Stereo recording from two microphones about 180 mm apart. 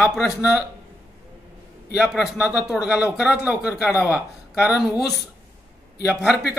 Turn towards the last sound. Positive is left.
turn(degrees=-5)  # may be behind; listen again after turning